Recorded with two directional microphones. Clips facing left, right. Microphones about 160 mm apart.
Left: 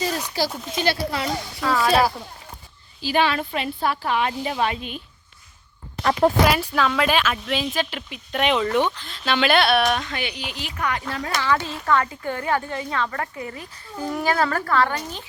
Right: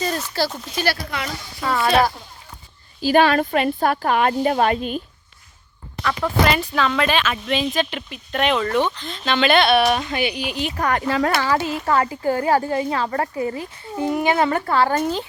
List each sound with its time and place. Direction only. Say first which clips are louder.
0.2 s speech: right 2 dB; 15° left (ahead or behind)
1.6 s speech: right 1 dB; centre (ahead or behind)
3.0 s speech: right 6 dB; 45° right (ahead or behind)
6.0 s speech: left 5 dB; 40° left (ahead or behind)
6.4 s speech: even; 10° left (ahead or behind); by 10.8 s 15° right (ahead or behind)
10.8 s speech: right 4 dB; 45° right (ahead or behind)
11.1 s speech: right 9 dB; 70° right (ahead or behind)
11.3 s a child's voice: right 3 dB; 40° right (ahead or behind)